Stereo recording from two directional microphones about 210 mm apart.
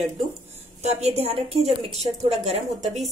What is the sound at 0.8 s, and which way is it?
A woman's voice, 30° right (ahead or behind).